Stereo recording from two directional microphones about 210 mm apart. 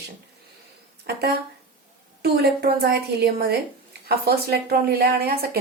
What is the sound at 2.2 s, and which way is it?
Speech, 50° right (ahead or behind).